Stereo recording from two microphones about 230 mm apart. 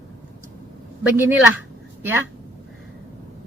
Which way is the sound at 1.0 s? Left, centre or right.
Centre.